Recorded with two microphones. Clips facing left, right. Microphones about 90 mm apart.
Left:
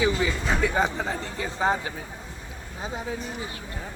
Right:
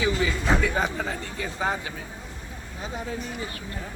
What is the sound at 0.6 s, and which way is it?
Speech, 30° left (ahead or behind).